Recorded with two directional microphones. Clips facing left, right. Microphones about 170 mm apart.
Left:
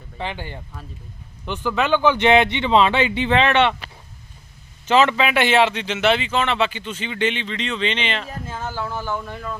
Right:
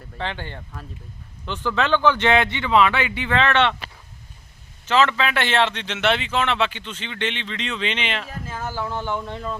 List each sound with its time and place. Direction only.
0.2 s speech: 10° left (ahead or behind)
4.9 s speech: 15° left (ahead or behind); by 8.3 s 5° right (ahead or behind)
8.6 s speech: 15° right (ahead or behind)